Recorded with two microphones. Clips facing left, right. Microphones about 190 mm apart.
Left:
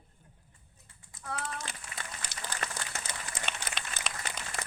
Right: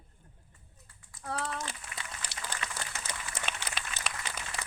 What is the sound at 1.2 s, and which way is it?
Speech, 35° right (ahead or behind).